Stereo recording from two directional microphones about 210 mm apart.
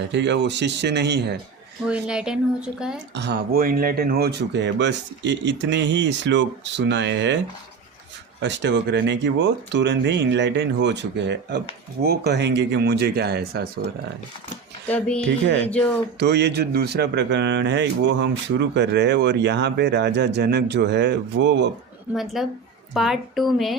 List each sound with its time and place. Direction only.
0.1 s speech: 55° right (ahead or behind)
1.9 s speech: 5° right (ahead or behind)
3.2 s speech: 50° right (ahead or behind)
8.4 s speech: 55° right (ahead or behind)
14.8 s speech: 5° left (ahead or behind)
15.3 s speech: 55° right (ahead or behind)
15.6 s speech: 10° left (ahead or behind)
16.1 s speech: 55° right (ahead or behind)
22.1 s speech: centre (ahead or behind)